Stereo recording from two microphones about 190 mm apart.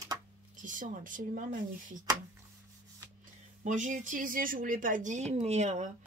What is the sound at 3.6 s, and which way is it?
Speech, 40° right (ahead or behind).